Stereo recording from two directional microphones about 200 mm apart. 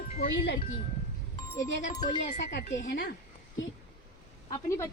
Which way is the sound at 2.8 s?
55° left (ahead or behind).